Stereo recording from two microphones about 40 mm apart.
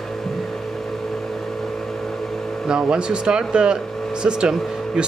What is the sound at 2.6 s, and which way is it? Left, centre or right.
Speech, centre.